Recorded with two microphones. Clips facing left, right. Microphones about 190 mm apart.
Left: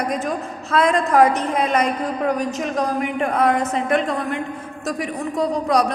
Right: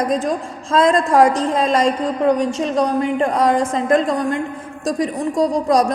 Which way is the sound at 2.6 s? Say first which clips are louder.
Right 4 dB; 30° right (ahead or behind).